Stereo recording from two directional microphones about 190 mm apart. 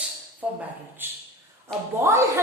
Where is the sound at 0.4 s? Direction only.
5° right (ahead or behind).